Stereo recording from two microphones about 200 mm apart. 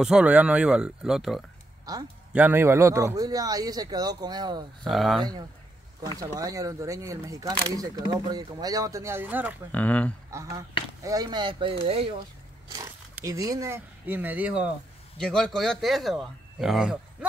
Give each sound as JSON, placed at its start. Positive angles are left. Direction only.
{"t": 0.0, "sound": "speech", "side_deg": -5}
{"t": 1.9, "sound": "speech", "side_deg": -20}
{"t": 4.8, "sound": "speech", "side_deg": 0}
{"t": 6.1, "sound": "speech", "side_deg": -15}
{"t": 9.7, "sound": "speech", "side_deg": 10}
{"t": 10.3, "sound": "speech", "side_deg": -15}
{"t": 12.6, "sound": "speech", "side_deg": -15}
{"t": 15.1, "sound": "speech", "side_deg": 5}